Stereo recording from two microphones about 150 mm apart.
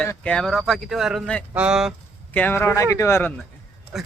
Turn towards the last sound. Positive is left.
turn(degrees=0)  # may be behind; listen again after turning